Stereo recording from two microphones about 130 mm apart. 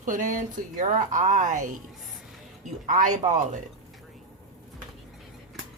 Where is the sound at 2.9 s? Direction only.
70° right (ahead or behind).